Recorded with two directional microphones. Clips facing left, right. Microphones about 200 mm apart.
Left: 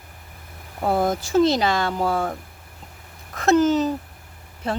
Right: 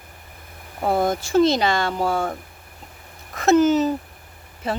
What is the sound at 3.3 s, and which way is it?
Speech, centre (ahead or behind).